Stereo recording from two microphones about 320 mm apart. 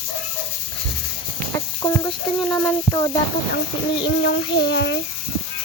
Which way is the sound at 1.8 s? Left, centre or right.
Centre.